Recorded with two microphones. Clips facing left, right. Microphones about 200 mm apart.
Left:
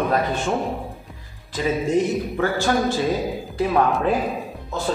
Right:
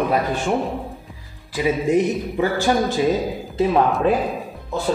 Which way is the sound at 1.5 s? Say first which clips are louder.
Right 2 dB; 15° right (ahead or behind).